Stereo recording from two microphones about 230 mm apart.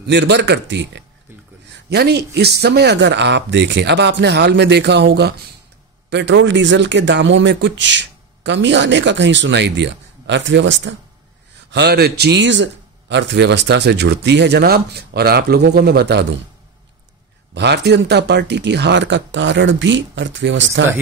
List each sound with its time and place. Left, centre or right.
0.0 s speech: right
17.6 s speech: right